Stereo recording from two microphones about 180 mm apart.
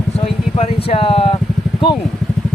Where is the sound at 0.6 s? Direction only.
30° left (ahead or behind).